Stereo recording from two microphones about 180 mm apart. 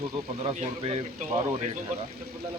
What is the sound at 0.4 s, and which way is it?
A man's voice, 35° right (ahead or behind).